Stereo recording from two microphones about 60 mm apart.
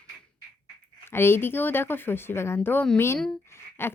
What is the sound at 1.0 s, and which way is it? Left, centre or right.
A woman's voice, left.